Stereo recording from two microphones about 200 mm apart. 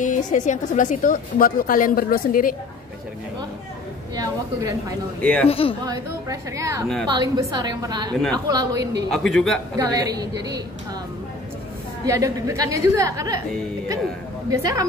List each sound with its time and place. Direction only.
0.0 s a woman's voice: 40° left (ahead or behind)
4.1 s a woman's voice: 20° right (ahead or behind)
5.2 s speech: 5° left (ahead or behind)
5.5 s speech: 30° left (ahead or behind)
5.9 s a woman's voice: 15° right (ahead or behind)
9.1 s a man's voice: centre (ahead or behind)
9.8 s a woman's voice: 20° right (ahead or behind)
12.1 s a woman's voice: 15° right (ahead or behind)
14.5 s a woman's voice: 15° right (ahead or behind)